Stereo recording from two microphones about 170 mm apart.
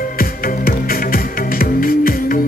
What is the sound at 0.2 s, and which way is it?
Music, 60° left (ahead or behind).